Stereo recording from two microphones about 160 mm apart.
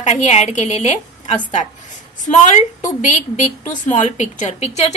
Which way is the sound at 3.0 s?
50° left (ahead or behind).